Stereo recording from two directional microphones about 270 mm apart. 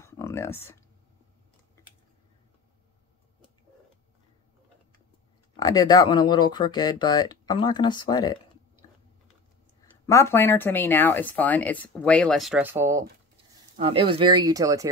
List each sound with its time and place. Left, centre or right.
0.0 s a sound: centre
5.6 s speech: centre
10.0 s speech: centre
13.7 s speech: centre